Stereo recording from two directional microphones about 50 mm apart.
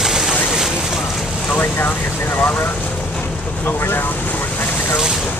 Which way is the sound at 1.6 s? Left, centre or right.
Left.